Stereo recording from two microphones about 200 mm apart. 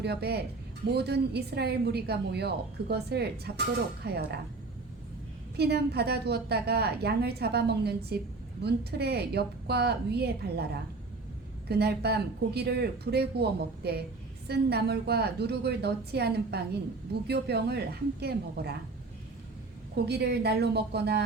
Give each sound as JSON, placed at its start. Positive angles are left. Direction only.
{"t": 0.0, "sound": "a woman's voice", "side_deg": -55}
{"t": 5.5, "sound": "a woman's voice", "side_deg": -55}
{"t": 11.7, "sound": "a woman's voice", "side_deg": -55}
{"t": 20.1, "sound": "a woman's voice", "side_deg": -55}